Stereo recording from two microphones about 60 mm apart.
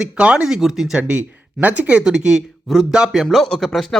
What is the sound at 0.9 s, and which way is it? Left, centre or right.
Speech, right.